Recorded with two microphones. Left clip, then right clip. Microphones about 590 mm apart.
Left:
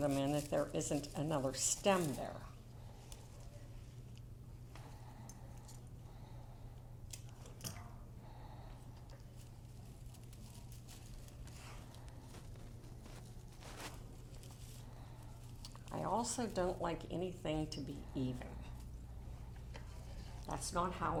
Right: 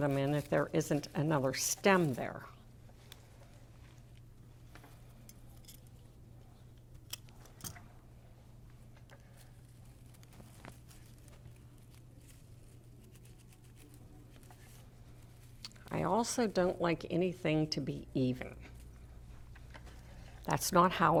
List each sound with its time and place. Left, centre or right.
0.0 s a woman's voice: right
15.6 s speech: right
20.5 s speech: right